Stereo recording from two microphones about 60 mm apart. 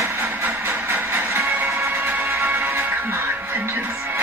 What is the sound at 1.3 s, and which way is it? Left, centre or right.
Music, right.